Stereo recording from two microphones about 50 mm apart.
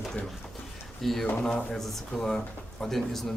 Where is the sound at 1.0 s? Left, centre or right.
Centre.